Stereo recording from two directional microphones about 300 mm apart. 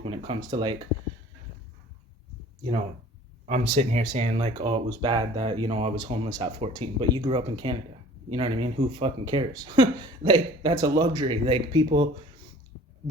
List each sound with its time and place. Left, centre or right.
0.0 s speech: centre
3.4 s speech: right